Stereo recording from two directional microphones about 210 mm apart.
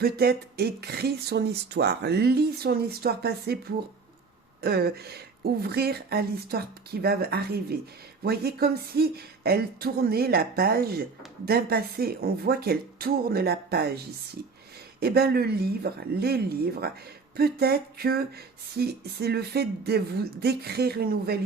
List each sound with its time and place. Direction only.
0.0 s speech: 50° right (ahead or behind)
4.6 s speech: 50° right (ahead or behind)
15.0 s speech: 50° right (ahead or behind)